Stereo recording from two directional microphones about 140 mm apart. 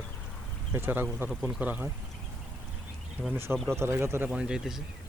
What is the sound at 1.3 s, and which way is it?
Speech, 5° right (ahead or behind).